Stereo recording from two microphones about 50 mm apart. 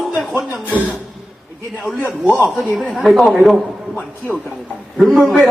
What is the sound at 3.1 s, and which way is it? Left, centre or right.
Speech, centre.